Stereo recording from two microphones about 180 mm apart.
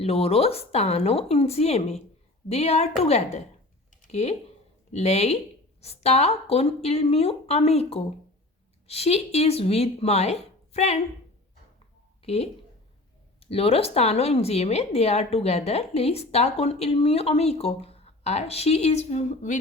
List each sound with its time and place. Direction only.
0.0 s a woman's voice: 35° left (ahead or behind)
12.2 s speech: 35° left (ahead or behind)
13.5 s a woman's voice: 35° left (ahead or behind)